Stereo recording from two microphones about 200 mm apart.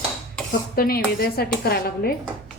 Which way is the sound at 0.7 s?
50° left (ahead or behind).